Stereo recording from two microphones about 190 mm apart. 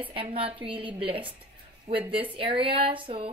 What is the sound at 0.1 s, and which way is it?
A woman's voice, 30° right (ahead or behind).